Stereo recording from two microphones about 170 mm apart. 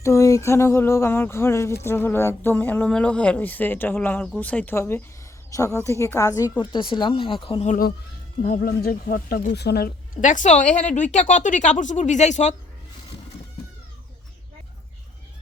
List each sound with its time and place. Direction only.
0.0 s speech: 15° left (ahead or behind); by 7.8 s 35° left (ahead or behind)
8.4 s speech: 55° left (ahead or behind)
9.6 s speech: 70° left (ahead or behind)
10.2 s speech: 45° left (ahead or behind)